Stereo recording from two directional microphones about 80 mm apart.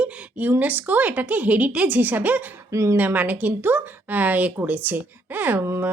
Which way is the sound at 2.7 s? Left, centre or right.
Right.